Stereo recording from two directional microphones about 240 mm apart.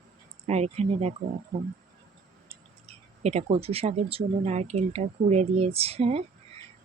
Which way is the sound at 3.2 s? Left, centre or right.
Right.